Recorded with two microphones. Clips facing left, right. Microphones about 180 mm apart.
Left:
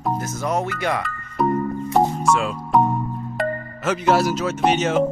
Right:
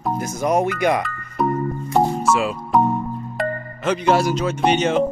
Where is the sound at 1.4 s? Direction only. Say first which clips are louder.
Left 1 dB; centre (ahead or behind).